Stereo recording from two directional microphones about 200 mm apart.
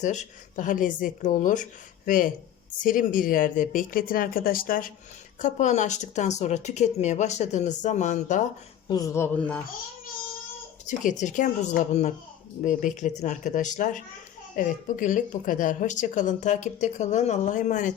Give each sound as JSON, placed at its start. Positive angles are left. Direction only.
{"t": 0.0, "sound": "speech", "side_deg": 35}
{"t": 8.9, "sound": "speech", "side_deg": 15}
{"t": 10.8, "sound": "speech", "side_deg": 40}